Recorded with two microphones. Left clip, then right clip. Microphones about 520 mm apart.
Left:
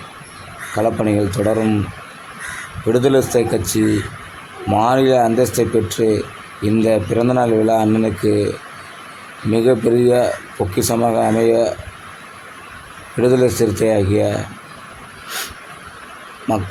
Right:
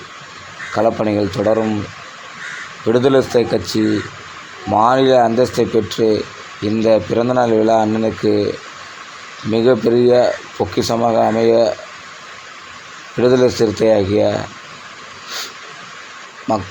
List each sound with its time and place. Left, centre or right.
0.8 s speech: left
2.9 s speech: left
9.5 s speech: left
13.1 s speech: left